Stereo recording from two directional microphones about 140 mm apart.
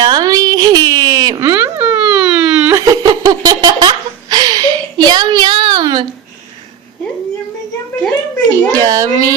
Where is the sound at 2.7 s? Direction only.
25° right (ahead or behind).